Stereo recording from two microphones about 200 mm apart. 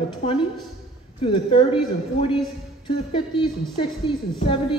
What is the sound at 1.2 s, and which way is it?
Speech, 25° left (ahead or behind).